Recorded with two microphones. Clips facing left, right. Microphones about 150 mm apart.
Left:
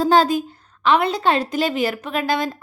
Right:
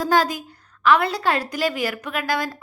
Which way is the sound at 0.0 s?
25° left (ahead or behind).